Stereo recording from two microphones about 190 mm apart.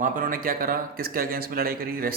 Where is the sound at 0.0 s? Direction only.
50° right (ahead or behind).